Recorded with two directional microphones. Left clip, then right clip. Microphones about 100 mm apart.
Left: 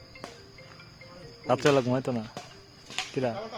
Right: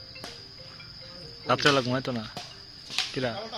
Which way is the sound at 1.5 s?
35° left (ahead or behind).